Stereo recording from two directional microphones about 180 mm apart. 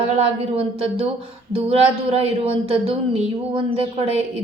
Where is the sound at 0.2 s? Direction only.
30° right (ahead or behind).